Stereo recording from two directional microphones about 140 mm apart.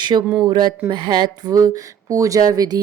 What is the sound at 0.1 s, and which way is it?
Speech, 35° right (ahead or behind).